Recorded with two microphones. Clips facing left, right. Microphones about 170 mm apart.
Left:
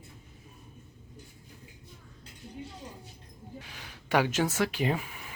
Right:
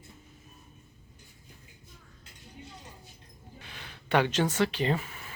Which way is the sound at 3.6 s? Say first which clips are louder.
Even; 10° left (ahead or behind).